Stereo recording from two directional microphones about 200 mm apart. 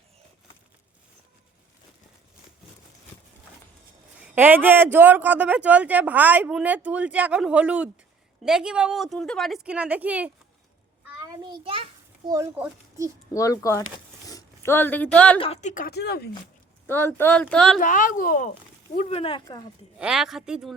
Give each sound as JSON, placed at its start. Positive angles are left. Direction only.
{"t": 4.2, "sound": "a man's voice", "side_deg": -10}
{"t": 11.4, "sound": "a child's voice", "side_deg": -25}
{"t": 12.3, "sound": "a man's voice", "side_deg": -15}
{"t": 13.3, "sound": "speech", "side_deg": 15}
{"t": 15.4, "sound": "speech", "side_deg": 30}
{"t": 15.7, "sound": "speech", "side_deg": 50}
{"t": 16.8, "sound": "speech", "side_deg": 10}
{"t": 17.7, "sound": "a child's voice", "side_deg": 40}
{"t": 18.9, "sound": "speech", "side_deg": 30}
{"t": 20.0, "sound": "a woman's voice", "side_deg": -5}